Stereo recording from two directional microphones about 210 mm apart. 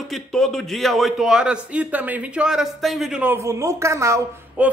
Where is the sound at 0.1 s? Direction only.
Centre (ahead or behind).